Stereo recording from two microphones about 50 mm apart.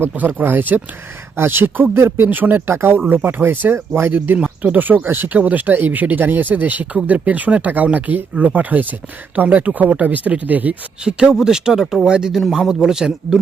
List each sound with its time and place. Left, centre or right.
0.2 s speech: right
2.0 s speech: right
2.2 s speech: right
2.7 s speech: right
4.4 s speech: right
11.0 s a man's voice: centre